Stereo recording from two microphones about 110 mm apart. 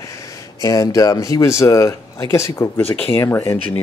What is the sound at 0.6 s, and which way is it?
Speech, 30° left (ahead or behind).